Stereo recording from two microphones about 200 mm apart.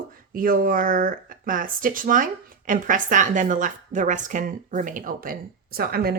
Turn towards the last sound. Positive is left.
turn(degrees=-50)  # may be behind; listen again after turning